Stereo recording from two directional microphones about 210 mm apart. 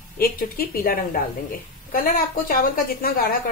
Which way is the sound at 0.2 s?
45° left (ahead or behind).